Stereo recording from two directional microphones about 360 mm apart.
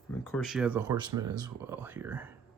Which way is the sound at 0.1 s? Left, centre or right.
Centre.